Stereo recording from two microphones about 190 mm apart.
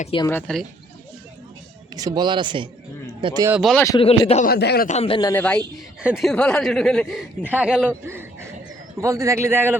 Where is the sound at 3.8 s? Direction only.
25° left (ahead or behind).